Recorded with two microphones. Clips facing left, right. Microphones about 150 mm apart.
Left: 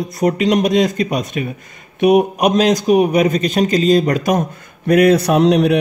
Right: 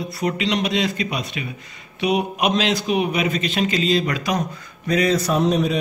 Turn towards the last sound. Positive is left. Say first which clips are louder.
# left 7 dB
turn(degrees=70)  # may be behind; listen again after turning